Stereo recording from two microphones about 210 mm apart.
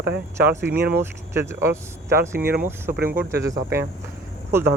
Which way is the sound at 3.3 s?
15° right (ahead or behind).